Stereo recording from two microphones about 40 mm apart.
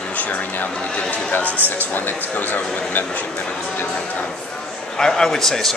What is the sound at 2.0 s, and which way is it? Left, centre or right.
Speech, left.